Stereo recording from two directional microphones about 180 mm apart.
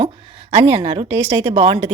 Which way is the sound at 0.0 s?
30° right (ahead or behind).